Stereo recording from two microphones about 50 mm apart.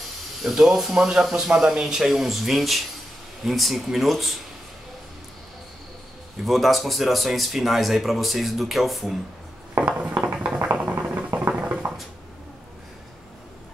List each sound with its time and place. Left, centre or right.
0.4 s speech: centre
6.4 s speech: centre
9.8 s a sound: right